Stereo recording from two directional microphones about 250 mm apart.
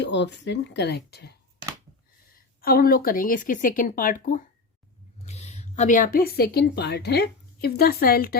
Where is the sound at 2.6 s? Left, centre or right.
Left.